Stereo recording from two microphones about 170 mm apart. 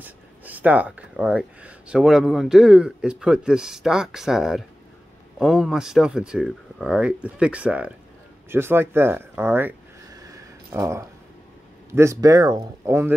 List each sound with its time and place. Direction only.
0.0 s speech: 10° right (ahead or behind)
8.5 s a sound: 15° right (ahead or behind)
11.9 s speech: 15° right (ahead or behind)